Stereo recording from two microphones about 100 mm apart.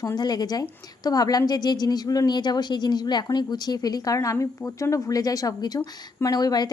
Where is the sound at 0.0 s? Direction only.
40° left (ahead or behind).